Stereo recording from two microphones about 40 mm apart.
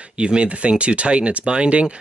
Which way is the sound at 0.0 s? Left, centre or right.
Right.